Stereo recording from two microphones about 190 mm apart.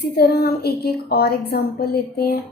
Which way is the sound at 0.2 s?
55° left (ahead or behind).